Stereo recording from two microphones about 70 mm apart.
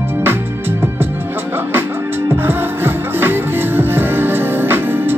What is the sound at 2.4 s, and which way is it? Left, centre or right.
Music, right.